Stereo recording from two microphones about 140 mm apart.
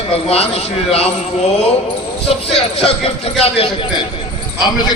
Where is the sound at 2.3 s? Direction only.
45° left (ahead or behind).